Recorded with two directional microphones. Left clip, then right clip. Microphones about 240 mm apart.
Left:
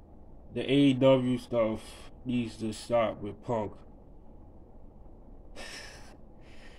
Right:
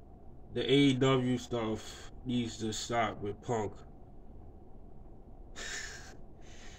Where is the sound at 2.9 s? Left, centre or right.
Centre.